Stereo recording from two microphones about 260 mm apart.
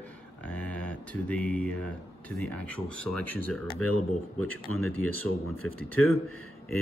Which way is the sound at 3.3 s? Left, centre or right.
Right.